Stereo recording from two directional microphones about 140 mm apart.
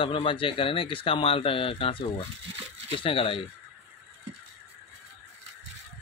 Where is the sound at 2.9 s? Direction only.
40° left (ahead or behind).